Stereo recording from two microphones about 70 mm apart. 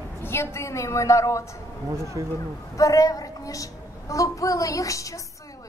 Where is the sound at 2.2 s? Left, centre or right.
Right.